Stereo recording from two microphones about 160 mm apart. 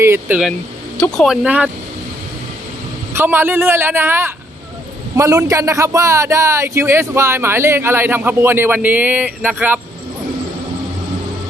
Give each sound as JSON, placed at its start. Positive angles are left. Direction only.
{"t": 0.0, "sound": "speech", "side_deg": -15}
{"t": 0.9, "sound": "speech", "side_deg": 5}
{"t": 3.1, "sound": "speech", "side_deg": -15}